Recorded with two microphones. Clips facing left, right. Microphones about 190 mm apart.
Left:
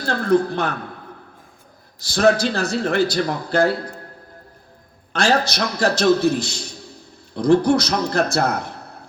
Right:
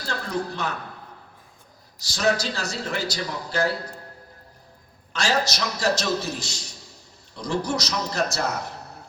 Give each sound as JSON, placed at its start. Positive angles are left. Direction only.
{"t": 0.0, "sound": "a man's voice", "side_deg": 55}
{"t": 2.0, "sound": "a man's voice", "side_deg": 55}
{"t": 5.1, "sound": "a man's voice", "side_deg": 55}